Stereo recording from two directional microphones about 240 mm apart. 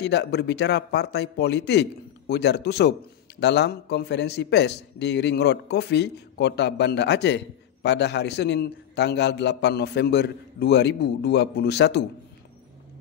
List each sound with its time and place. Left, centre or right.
0.0 s speech: left